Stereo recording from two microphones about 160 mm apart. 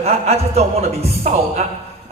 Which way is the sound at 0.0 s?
40° right (ahead or behind).